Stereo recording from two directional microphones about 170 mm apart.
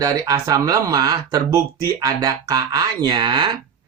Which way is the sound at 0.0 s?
20° right (ahead or behind).